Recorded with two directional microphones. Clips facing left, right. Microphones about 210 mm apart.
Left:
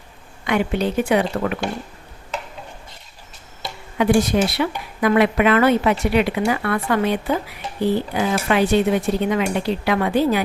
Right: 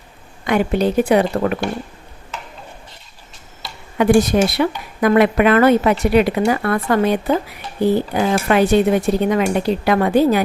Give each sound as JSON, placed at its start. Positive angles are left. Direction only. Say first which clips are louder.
{"t": 0.4, "sound": "speech", "louder": "right 4 dB", "side_deg": -40}
{"t": 3.9, "sound": "speech", "louder": "right 3 dB", "side_deg": -50}